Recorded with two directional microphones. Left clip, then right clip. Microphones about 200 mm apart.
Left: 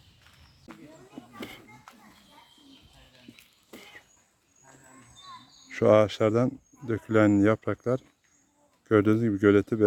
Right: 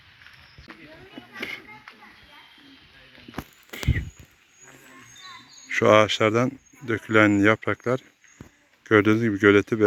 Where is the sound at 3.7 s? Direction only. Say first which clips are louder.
Right 13 dB; centre (ahead or behind).